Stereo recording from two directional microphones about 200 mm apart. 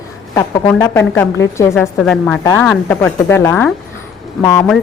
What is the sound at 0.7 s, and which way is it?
A woman's voice, 15° left (ahead or behind).